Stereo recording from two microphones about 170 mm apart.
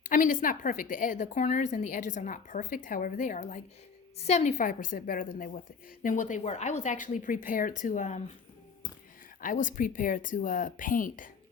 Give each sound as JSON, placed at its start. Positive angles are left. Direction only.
{"t": 0.0, "sound": "a woman's voice", "side_deg": 50}
{"t": 9.4, "sound": "a woman's voice", "side_deg": 50}